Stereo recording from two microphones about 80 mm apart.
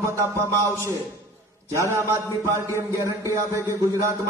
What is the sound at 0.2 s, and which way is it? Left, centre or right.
A man's voice, right.